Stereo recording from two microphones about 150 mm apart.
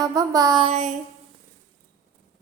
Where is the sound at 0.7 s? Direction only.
45° right (ahead or behind).